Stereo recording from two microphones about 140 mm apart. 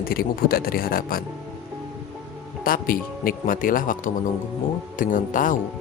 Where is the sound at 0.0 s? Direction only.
90° left.